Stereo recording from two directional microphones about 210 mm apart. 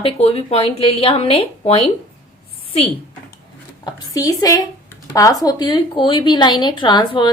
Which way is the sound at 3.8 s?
15° left (ahead or behind).